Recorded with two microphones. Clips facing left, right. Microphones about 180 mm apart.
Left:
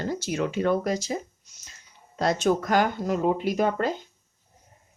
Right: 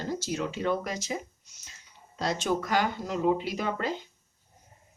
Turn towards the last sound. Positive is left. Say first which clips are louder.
# left 6 dB
turn(degrees=45)  # may be behind; listen again after turning